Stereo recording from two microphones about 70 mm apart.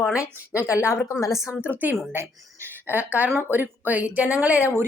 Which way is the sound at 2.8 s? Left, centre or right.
Right.